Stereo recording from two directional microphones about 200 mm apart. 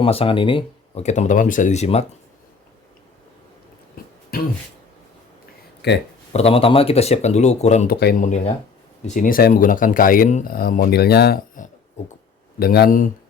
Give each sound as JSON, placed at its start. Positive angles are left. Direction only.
{"t": 0.0, "sound": "speech", "side_deg": 30}
{"t": 3.9, "sound": "a sound", "side_deg": 50}
{"t": 5.8, "sound": "speech", "side_deg": 55}
{"t": 6.3, "sound": "speech", "side_deg": 30}
{"t": 7.9, "sound": "speech", "side_deg": 50}
{"t": 12.5, "sound": "speech", "side_deg": 50}